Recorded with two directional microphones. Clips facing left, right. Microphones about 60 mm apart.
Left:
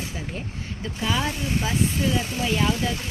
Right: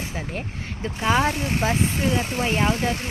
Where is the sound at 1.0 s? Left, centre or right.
Right.